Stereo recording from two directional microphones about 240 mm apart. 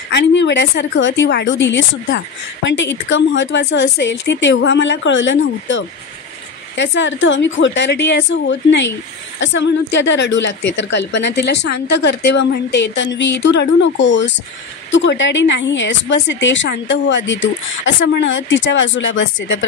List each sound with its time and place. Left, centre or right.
0.1 s a woman's voice: left